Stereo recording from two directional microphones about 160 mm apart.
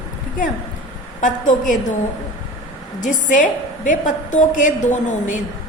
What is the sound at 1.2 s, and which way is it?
Speech, 55° left (ahead or behind).